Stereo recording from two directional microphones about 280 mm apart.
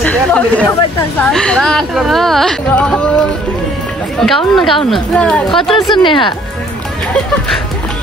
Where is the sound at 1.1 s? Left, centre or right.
Centre.